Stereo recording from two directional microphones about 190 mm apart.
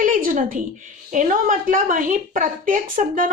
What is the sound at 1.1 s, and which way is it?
A woman's voice, 45° right (ahead or behind).